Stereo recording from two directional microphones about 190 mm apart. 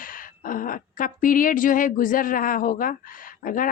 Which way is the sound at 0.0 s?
45° left (ahead or behind).